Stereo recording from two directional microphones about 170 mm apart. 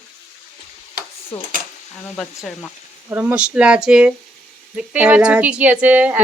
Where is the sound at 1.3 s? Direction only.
35° left (ahead or behind).